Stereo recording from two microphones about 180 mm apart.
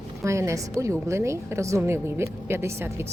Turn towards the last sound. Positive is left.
turn(degrees=-15)  # may be behind; listen again after turning